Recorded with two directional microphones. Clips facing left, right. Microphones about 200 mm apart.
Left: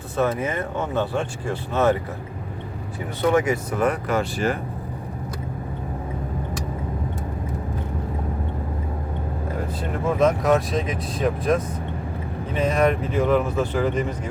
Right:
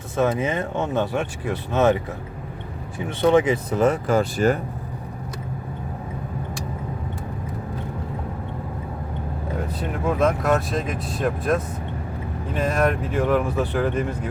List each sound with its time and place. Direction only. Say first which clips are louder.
0.2 s speech: right 1 dB; 25° right (ahead or behind)
3.2 s speech: right 3 dB; 25° right (ahead or behind)
4.2 s speech: right 4 dB; 40° right (ahead or behind)
10.1 s speech: left 2 dB; centre (ahead or behind)
12.5 s speech: left 2 dB; centre (ahead or behind)